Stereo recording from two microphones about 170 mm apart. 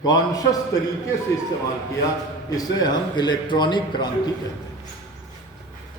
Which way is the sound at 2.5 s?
20° left (ahead or behind).